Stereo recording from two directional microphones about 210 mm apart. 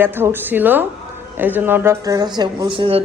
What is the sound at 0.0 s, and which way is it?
A woman's voice, 10° right (ahead or behind).